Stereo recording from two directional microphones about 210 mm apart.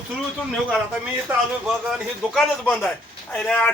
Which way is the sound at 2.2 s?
5° left (ahead or behind).